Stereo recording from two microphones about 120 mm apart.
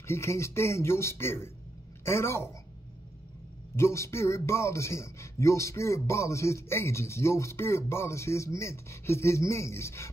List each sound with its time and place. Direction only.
0.0 s a man's voice: 20° left (ahead or behind)
3.7 s a man's voice: 20° left (ahead or behind)